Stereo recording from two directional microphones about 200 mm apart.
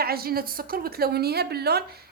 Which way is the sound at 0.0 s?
50° right (ahead or behind).